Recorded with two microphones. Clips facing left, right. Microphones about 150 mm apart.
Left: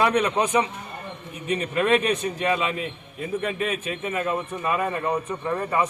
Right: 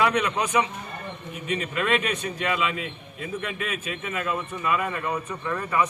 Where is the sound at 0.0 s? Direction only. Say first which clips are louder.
Left 2 dB; 35° left (ahead or behind).